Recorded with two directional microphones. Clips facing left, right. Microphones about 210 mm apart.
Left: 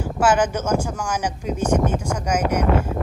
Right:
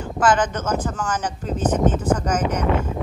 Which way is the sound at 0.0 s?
10° left (ahead or behind).